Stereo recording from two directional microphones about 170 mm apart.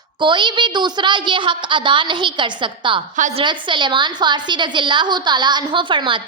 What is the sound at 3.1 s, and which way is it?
Speech, 45° right (ahead or behind).